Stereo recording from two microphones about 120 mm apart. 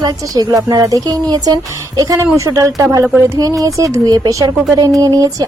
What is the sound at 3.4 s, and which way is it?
Speech, 30° right (ahead or behind).